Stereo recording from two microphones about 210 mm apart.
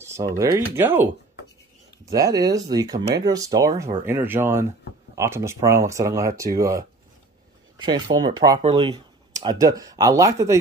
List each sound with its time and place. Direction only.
0.0 s speech: 15° right (ahead or behind)
2.0 s speech: 15° right (ahead or behind)